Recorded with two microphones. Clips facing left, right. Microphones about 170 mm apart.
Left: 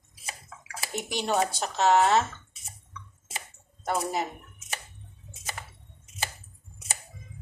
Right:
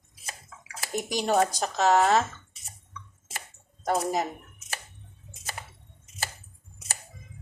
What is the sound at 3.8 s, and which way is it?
Speech, 40° right (ahead or behind).